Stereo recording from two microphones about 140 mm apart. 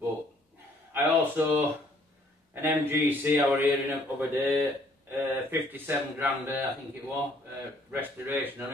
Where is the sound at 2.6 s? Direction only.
15° right (ahead or behind).